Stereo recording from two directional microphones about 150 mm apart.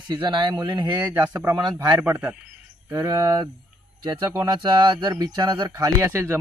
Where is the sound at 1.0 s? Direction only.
15° right (ahead or behind).